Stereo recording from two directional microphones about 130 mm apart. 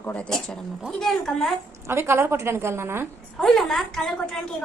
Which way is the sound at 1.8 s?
20° right (ahead or behind).